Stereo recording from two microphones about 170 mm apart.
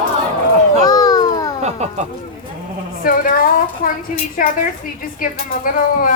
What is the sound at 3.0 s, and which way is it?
A woman's voice, 55° left (ahead or behind).